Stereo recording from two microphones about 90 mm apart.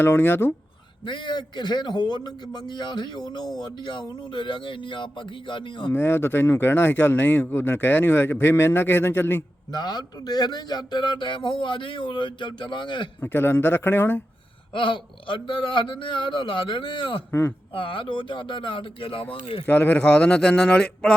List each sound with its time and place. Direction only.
0.0 s speech: 25° left (ahead or behind)
1.0 s a man's voice: 60° left (ahead or behind)
5.9 s speech: 25° left (ahead or behind)
9.7 s a man's voice: 50° left (ahead or behind)
13.2 s speech: 25° left (ahead or behind)
14.7 s a man's voice: 70° left (ahead or behind)
19.6 s a man's voice: 20° left (ahead or behind)